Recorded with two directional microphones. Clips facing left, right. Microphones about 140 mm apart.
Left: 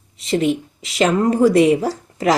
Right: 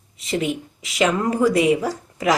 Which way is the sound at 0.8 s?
30° left (ahead or behind).